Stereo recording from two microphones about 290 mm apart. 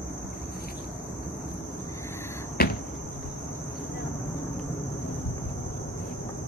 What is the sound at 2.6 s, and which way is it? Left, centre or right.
Cricket, left.